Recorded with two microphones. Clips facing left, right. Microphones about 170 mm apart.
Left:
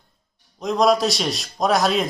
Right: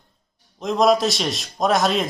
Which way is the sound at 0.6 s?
Centre (ahead or behind).